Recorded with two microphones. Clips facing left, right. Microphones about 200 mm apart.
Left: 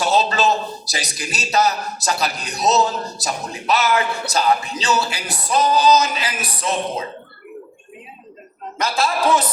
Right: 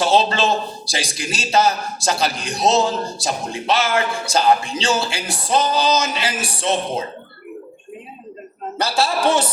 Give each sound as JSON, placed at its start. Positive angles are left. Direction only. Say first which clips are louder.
{"t": 0.0, "sound": "a sound", "louder": "right 2 dB", "side_deg": -25}
{"t": 0.9, "sound": "a man's voice", "louder": "right 3 dB", "side_deg": -25}
{"t": 8.8, "sound": "a man's voice", "louder": "right 1 dB", "side_deg": -30}